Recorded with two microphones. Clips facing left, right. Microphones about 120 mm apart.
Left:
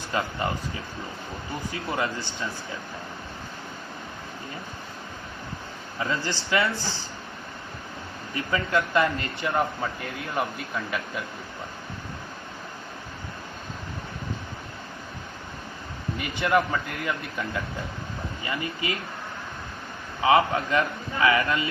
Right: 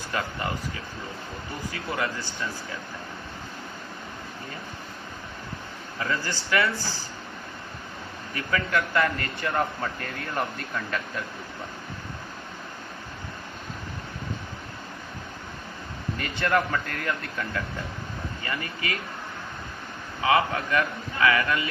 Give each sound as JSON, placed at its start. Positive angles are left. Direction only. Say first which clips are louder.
{"t": 0.1, "sound": "a man's voice", "louder": "left 3 dB", "side_deg": 25}
{"t": 1.7, "sound": "a man's voice", "louder": "left 1 dB", "side_deg": 25}
{"t": 6.0, "sound": "a man's voice", "louder": "left 1 dB", "side_deg": 25}
{"t": 8.4, "sound": "a man's voice", "louder": "left 1 dB", "side_deg": 25}
{"t": 9.6, "sound": "speech", "louder": "left 1 dB", "side_deg": 10}
{"t": 16.1, "sound": "a man's voice", "louder": "left 2 dB", "side_deg": 15}
{"t": 20.2, "sound": "a man's voice", "louder": "left 3 dB", "side_deg": 25}